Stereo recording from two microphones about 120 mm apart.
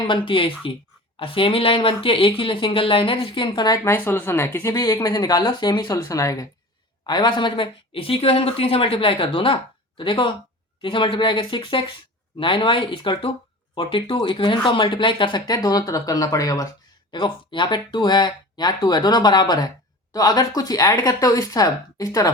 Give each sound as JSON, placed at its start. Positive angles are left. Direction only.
{"t": 0.1, "sound": "speech", "side_deg": 45}
{"t": 3.8, "sound": "speech", "side_deg": 20}
{"t": 4.7, "sound": "speech", "side_deg": 30}
{"t": 17.1, "sound": "speech", "side_deg": 40}